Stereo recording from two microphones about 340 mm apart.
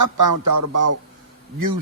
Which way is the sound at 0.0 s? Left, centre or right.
Right.